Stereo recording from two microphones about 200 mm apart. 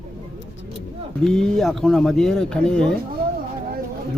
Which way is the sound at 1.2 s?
Centre (ahead or behind).